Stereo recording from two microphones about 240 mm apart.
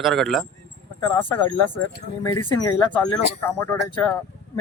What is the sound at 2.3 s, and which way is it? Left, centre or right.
Speech, centre.